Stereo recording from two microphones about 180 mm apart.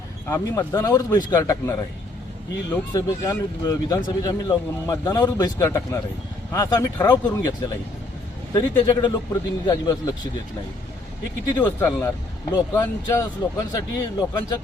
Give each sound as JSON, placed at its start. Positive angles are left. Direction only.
{"t": 0.3, "sound": "speech", "side_deg": 15}
{"t": 11.6, "sound": "speech", "side_deg": 15}